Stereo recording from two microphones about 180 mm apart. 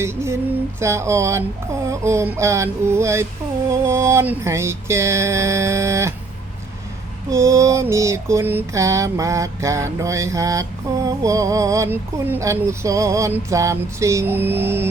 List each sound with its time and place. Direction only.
0.0 s mantra: 15° right (ahead or behind)
7.3 s mantra: 15° right (ahead or behind)